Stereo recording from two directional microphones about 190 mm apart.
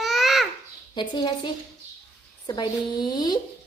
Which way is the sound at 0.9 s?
25° left (ahead or behind).